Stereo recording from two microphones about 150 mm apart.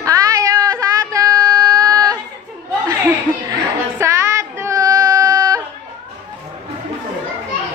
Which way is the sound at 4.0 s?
20° right (ahead or behind).